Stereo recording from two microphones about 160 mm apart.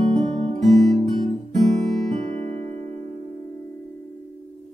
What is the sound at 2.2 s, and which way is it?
Music, 45° right (ahead or behind).